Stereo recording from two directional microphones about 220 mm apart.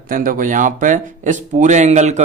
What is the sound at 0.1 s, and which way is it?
Speech, 40° right (ahead or behind).